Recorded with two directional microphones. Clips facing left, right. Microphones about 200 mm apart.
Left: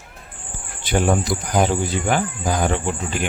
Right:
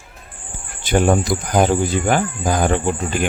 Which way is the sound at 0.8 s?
45° right (ahead or behind).